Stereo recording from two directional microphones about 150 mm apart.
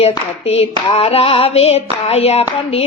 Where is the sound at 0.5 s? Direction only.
40° left (ahead or behind).